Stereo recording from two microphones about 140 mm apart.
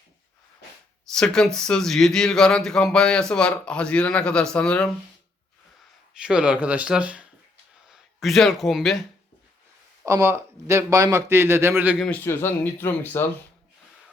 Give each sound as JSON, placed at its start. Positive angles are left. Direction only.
{"t": 1.1, "sound": "speech", "side_deg": 5}
{"t": 6.2, "sound": "speech", "side_deg": -5}
{"t": 10.1, "sound": "a man's voice", "side_deg": -20}
{"t": 11.9, "sound": "speech", "side_deg": 10}